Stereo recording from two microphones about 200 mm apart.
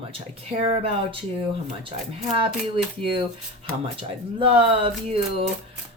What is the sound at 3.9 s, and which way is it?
Speech, 30° right (ahead or behind).